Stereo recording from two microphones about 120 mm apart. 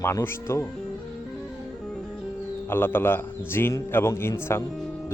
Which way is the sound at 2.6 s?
20° left (ahead or behind).